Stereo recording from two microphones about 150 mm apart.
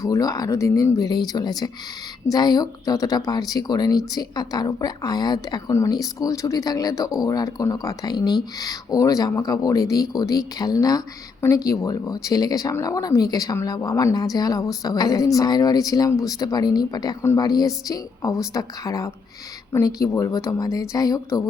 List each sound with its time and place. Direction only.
0.0 s speech: 25° left (ahead or behind)